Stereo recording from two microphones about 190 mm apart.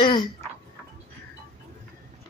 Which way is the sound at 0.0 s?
25° left (ahead or behind).